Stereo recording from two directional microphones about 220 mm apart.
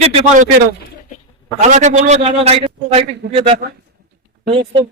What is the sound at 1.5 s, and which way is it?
A man's voice, 30° right (ahead or behind).